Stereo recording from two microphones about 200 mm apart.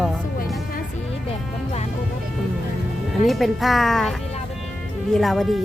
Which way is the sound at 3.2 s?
Centre (ahead or behind).